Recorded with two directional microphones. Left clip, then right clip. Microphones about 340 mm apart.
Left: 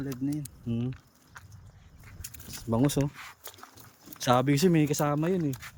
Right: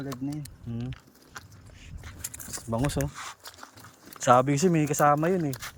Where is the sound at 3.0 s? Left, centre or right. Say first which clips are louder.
Even; right.